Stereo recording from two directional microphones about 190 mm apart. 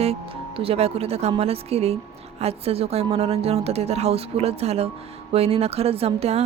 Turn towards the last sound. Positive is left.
turn(degrees=-30)  # may be behind; listen again after turning